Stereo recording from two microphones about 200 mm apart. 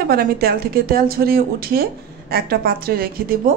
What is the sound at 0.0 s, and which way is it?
A woman's voice, 50° right (ahead or behind).